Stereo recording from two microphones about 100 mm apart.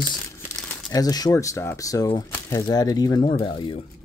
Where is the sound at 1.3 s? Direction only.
30° left (ahead or behind).